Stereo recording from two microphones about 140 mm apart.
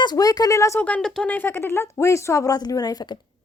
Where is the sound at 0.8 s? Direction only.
5° left (ahead or behind).